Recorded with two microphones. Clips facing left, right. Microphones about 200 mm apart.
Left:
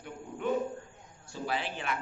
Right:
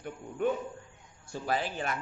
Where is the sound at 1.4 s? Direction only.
40° right (ahead or behind).